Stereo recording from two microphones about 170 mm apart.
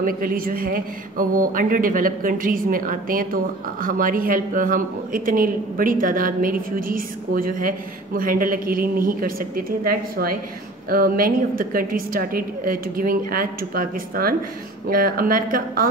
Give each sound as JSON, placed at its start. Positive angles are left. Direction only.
{"t": 0.0, "sound": "speech", "side_deg": -55}